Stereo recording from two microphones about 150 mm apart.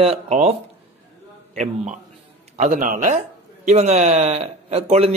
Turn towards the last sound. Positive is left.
turn(degrees=-45)  # may be behind; listen again after turning